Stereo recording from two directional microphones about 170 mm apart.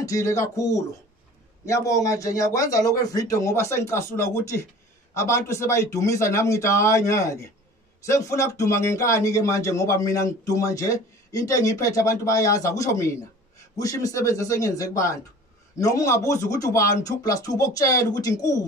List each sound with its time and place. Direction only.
0.0 s speech: 20° left (ahead or behind)